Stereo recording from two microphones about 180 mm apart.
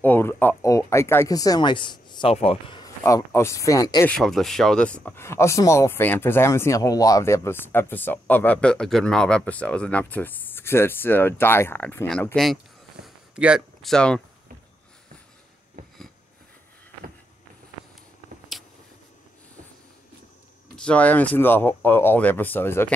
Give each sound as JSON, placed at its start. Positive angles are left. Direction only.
{"t": 0.0, "sound": "speech", "side_deg": 10}
{"t": 2.8, "sound": "speech", "side_deg": 15}
{"t": 4.1, "sound": "speech", "side_deg": 0}
{"t": 13.0, "sound": "a sound", "side_deg": -5}
{"t": 18.5, "sound": "a sound", "side_deg": 0}
{"t": 20.7, "sound": "speech", "side_deg": 5}